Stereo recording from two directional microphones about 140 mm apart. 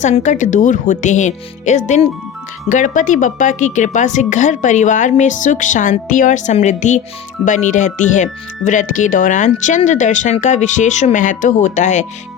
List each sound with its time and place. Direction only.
0.0 s a woman's voice: 60° left (ahead or behind)